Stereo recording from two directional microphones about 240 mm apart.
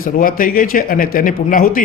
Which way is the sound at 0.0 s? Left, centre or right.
Left.